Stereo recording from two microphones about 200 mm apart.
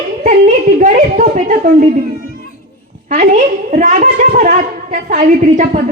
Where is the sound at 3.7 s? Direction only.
40° right (ahead or behind).